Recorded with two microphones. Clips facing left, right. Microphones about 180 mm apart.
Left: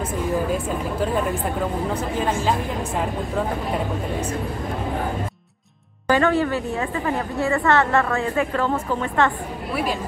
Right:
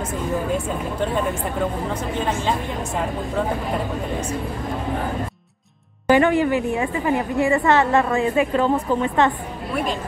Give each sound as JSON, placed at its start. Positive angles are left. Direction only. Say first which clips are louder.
{"t": 1.0, "sound": "speech", "louder": "even", "side_deg": 0}
{"t": 6.0, "sound": "a woman's voice", "louder": "right 3 dB", "side_deg": -15}